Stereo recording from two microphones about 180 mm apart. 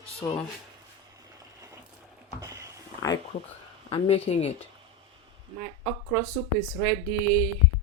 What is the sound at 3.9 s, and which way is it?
Speech, 35° left (ahead or behind).